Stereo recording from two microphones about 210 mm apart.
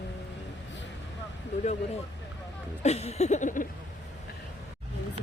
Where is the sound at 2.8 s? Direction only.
30° left (ahead or behind).